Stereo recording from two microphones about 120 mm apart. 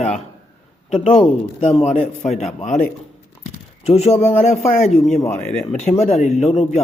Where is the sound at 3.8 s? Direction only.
60° left (ahead or behind).